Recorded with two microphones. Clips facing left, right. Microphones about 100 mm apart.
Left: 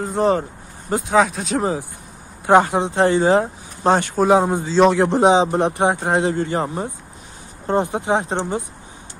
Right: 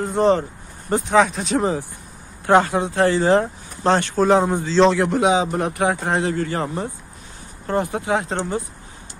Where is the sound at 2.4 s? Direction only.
15° left (ahead or behind).